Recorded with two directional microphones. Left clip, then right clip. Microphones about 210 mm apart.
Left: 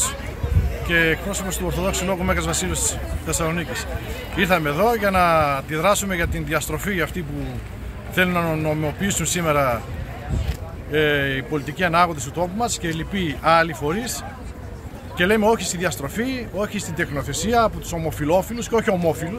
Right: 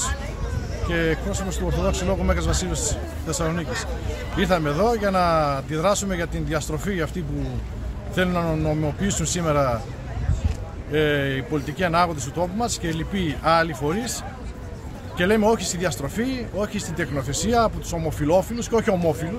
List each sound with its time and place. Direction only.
0.8 s speech: 5° right (ahead or behind)
2.5 s speech: 30° right (ahead or behind)
4.4 s speech: 10° right (ahead or behind)
8.2 s speech: 5° right (ahead or behind)
10.9 s speech: 5° right (ahead or behind)
15.1 s speech: 10° right (ahead or behind)